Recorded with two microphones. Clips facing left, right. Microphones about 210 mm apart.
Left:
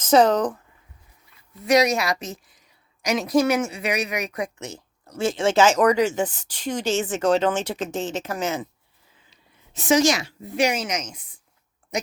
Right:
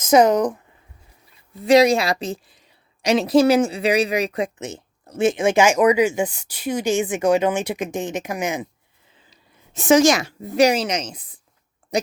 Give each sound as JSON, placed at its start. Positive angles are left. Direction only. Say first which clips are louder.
{"t": 0.0, "sound": "speech", "louder": "right 2 dB", "side_deg": -10}
{"t": 1.6, "sound": "speech", "louder": "right 5 dB", "side_deg": -30}
{"t": 9.7, "sound": "speech", "louder": "right 4 dB", "side_deg": -50}